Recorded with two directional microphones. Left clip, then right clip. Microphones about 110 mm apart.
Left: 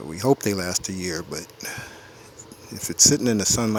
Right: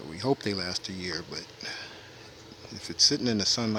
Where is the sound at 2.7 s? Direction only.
55° left (ahead or behind).